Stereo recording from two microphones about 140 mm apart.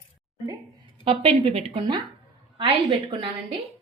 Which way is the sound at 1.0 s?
45° right (ahead or behind).